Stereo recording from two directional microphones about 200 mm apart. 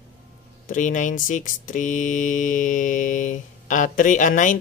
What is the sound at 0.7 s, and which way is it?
Speech, 40° left (ahead or behind).